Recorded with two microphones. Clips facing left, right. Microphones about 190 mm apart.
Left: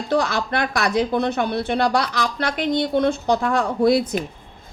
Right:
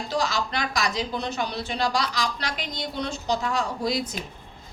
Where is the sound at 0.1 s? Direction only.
60° left (ahead or behind).